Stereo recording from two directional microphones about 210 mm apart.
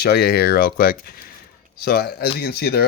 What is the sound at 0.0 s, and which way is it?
Speech, 50° left (ahead or behind).